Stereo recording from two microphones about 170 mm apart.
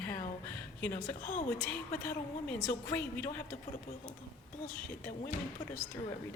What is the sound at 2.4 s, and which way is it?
Speech, 10° left (ahead or behind).